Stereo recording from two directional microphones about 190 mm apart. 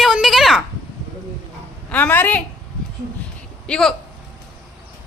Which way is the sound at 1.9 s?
10° left (ahead or behind).